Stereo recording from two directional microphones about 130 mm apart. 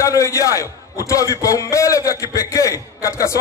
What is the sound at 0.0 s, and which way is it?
A man's voice, 25° left (ahead or behind).